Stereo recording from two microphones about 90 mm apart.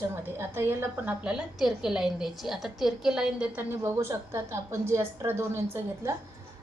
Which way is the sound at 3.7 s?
30° right (ahead or behind).